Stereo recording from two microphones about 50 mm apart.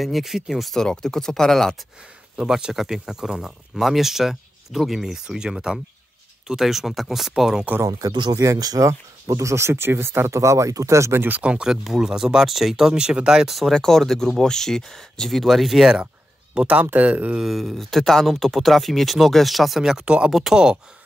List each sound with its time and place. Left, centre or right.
0.0 s speech: centre
0.7 s speech: centre
2.3 s speech: centre
8.4 s speech: right
11.1 s speech: right
11.4 s speech: right
11.7 s speech: centre
16.6 s speech: right
16.9 s speech: right
17.4 s speech: centre
19.8 s speech: centre